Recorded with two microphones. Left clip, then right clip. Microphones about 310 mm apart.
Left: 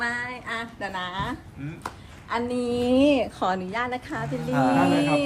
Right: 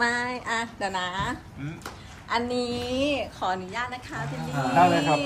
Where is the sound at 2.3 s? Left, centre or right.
Centre.